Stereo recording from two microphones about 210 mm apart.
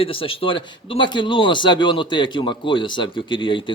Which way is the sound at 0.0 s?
25° left (ahead or behind).